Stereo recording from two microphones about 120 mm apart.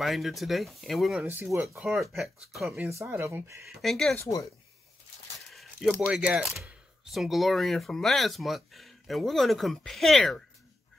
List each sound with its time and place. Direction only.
0.0 s speech: centre (ahead or behind)
1.2 s speech: 20° right (ahead or behind)
1.8 s speech: centre (ahead or behind)
3.0 s speech: 20° right (ahead or behind)
3.8 s speech: centre (ahead or behind)
4.2 s speech: 25° left (ahead or behind)
5.5 s speech: centre (ahead or behind)